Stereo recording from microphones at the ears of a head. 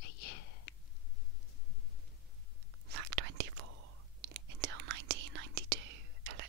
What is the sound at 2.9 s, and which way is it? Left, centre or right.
Whispering, right.